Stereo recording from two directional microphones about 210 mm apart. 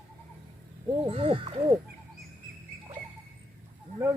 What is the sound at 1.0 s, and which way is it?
Speech, 25° right (ahead or behind).